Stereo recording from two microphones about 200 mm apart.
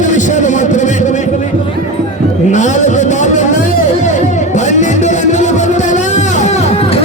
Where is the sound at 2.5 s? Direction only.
35° left (ahead or behind).